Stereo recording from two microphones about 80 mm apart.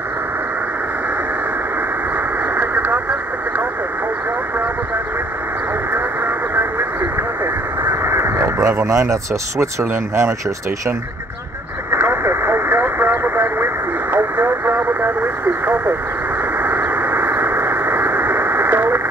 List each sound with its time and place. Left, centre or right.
2.1 s vehicle: right
5.9 s vehicle: right
7.8 s speech: right
11.9 s vehicle: right
14.1 s radio: right
16.5 s a sound: right